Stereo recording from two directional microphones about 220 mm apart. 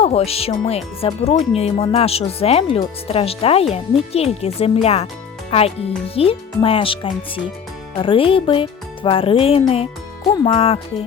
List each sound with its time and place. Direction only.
0.0 s speech: 25° left (ahead or behind)